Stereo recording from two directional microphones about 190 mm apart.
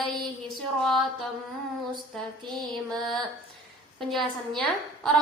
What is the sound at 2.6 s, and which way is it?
Music, 20° right (ahead or behind).